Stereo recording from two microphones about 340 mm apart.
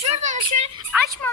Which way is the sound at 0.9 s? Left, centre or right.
Centre.